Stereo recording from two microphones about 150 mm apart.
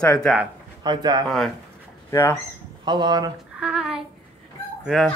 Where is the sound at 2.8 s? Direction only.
30° right (ahead or behind).